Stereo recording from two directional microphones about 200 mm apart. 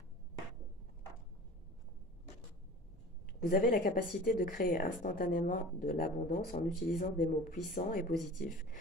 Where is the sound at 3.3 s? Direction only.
45° left (ahead or behind).